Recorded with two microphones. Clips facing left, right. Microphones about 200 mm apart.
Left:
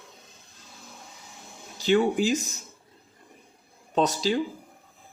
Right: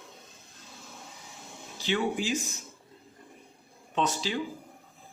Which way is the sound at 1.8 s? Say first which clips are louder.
Left 7 dB; 40° left (ahead or behind).